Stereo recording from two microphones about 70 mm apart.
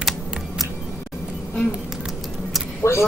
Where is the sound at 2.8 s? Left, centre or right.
Left.